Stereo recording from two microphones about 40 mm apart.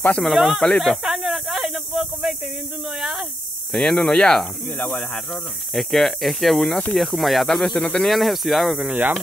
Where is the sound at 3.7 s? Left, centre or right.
Centre.